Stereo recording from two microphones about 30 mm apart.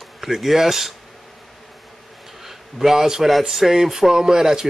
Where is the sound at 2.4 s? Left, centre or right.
Centre.